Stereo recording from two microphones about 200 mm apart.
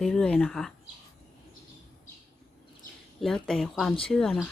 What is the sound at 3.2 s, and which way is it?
Speech, centre (ahead or behind).